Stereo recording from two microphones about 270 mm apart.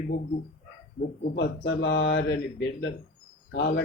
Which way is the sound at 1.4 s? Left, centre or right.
Left.